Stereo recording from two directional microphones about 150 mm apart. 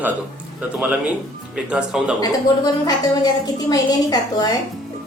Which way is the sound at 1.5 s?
5° right (ahead or behind).